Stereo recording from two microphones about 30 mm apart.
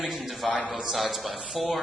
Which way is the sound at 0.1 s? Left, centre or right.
Centre.